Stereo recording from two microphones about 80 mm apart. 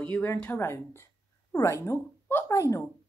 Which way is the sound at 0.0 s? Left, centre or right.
Left.